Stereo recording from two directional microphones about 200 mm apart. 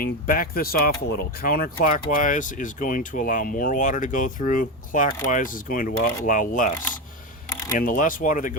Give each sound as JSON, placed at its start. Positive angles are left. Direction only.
{"t": 0.0, "sound": "speech", "side_deg": 45}
{"t": 7.7, "sound": "speech", "side_deg": 45}